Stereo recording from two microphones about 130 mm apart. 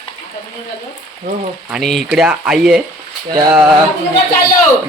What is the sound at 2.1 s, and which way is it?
Speech, 10° right (ahead or behind).